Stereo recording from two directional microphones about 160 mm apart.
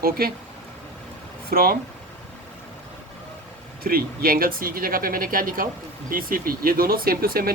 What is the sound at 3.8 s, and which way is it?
Speech, 65° right (ahead or behind).